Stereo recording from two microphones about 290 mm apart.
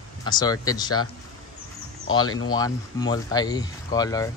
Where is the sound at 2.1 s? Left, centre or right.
Centre.